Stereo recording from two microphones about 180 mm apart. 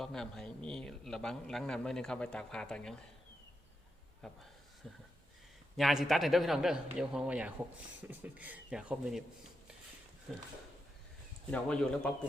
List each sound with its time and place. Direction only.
0.0 s a man's voice: 5° left (ahead or behind)
4.2 s a man's voice: 5° left (ahead or behind)
5.7 s a man's voice: centre (ahead or behind)
11.5 s a man's voice: 5° left (ahead or behind)